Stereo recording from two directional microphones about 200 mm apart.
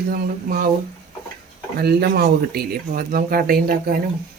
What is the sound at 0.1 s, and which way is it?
Speech, 45° right (ahead or behind).